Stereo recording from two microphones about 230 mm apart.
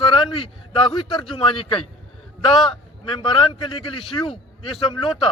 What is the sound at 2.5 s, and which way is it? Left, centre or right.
Speech, centre.